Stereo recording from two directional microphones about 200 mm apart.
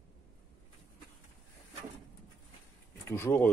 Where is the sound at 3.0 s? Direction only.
15° left (ahead or behind).